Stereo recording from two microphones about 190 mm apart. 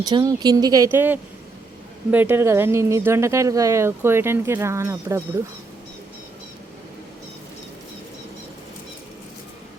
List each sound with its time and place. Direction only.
0.0 s speech: 20° right (ahead or behind)